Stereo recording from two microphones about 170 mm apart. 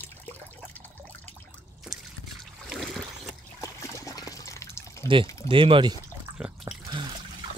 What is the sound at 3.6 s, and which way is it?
Water, 20° left (ahead or behind).